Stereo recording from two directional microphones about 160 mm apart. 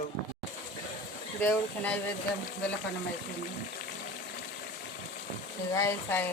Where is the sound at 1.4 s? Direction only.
10° left (ahead or behind).